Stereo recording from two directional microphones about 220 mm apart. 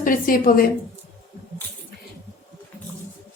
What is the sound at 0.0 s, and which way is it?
Speech, 40° left (ahead or behind).